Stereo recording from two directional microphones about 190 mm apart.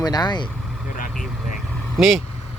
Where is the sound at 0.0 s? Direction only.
20° left (ahead or behind).